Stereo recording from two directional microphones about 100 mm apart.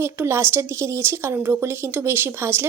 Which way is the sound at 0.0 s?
25° right (ahead or behind).